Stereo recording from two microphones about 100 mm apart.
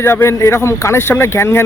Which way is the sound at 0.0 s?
25° left (ahead or behind).